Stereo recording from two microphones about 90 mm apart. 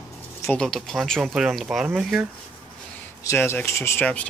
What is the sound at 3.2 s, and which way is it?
Speech, 30° left (ahead or behind).